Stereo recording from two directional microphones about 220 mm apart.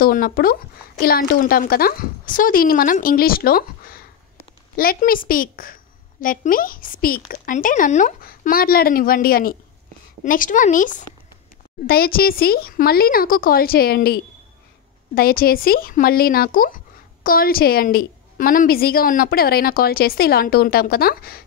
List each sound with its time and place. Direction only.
0.0 s speech: 40° left (ahead or behind)